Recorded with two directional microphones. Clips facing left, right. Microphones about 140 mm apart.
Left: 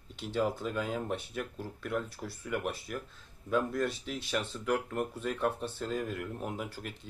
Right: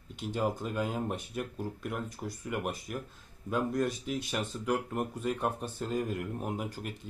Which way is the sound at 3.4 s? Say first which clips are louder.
Even; 15° right (ahead or behind).